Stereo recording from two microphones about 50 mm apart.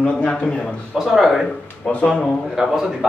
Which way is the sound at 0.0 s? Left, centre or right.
Left.